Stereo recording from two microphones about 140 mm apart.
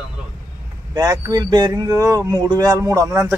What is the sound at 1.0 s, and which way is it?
Speech, 25° right (ahead or behind).